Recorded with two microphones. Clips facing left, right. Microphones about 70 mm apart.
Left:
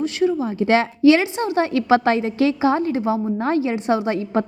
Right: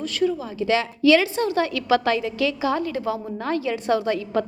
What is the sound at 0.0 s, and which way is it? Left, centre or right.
A woman's voice, left.